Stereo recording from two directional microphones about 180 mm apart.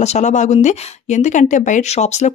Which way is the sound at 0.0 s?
40° left (ahead or behind).